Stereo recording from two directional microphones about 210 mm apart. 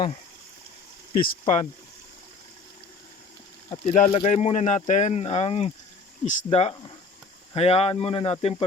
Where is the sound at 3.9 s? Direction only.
25° left (ahead or behind).